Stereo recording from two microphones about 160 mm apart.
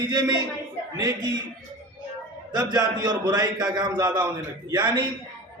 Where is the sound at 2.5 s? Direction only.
25° right (ahead or behind).